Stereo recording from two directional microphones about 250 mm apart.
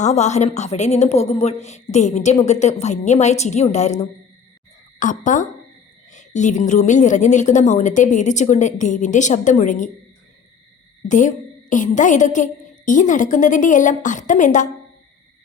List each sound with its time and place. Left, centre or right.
0.0 s a woman's voice: left
4.9 s a woman's voice: left
11.1 s a woman's voice: left